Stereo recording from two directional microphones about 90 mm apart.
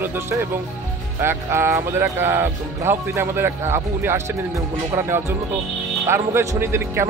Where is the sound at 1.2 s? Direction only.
30° right (ahead or behind).